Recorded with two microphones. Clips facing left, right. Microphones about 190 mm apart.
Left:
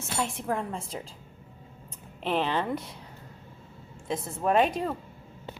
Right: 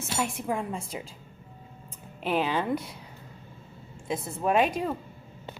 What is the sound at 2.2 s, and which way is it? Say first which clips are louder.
Speech: right 1 dB; 5° right (ahead or behind).